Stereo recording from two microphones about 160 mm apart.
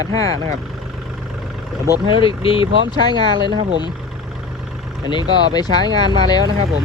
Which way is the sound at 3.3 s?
30° right (ahead or behind).